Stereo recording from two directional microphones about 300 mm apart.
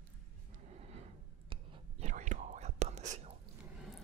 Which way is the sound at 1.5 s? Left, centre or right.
Centre.